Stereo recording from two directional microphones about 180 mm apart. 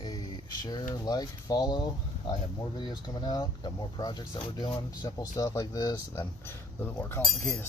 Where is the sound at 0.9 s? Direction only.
20° left (ahead or behind).